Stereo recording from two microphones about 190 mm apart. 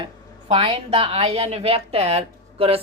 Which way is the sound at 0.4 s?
30° right (ahead or behind).